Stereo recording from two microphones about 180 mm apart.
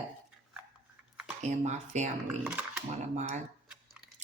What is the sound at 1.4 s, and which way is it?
Speech, 40° right (ahead or behind).